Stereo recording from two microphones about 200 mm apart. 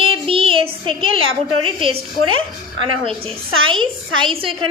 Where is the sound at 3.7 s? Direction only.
25° right (ahead or behind).